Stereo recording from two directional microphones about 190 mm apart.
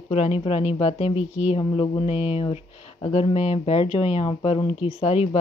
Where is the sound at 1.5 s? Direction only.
25° left (ahead or behind).